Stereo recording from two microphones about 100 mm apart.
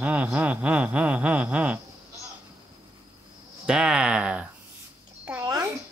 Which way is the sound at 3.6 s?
10° right (ahead or behind).